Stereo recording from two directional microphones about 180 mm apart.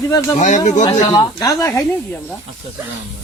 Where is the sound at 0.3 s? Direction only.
45° left (ahead or behind).